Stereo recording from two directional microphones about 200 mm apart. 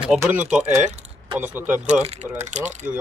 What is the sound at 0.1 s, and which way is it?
Speech, 10° right (ahead or behind).